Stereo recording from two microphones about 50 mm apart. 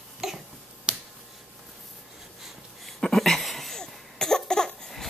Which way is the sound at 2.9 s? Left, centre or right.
Centre.